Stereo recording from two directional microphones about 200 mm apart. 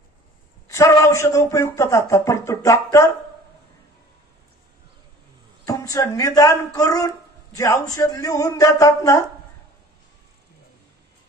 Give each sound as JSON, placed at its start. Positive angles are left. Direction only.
{"t": 0.7, "sound": "speech", "side_deg": 15}
{"t": 5.7, "sound": "speech", "side_deg": 15}